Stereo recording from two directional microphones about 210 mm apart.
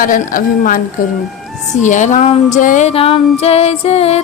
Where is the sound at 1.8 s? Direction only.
35° left (ahead or behind).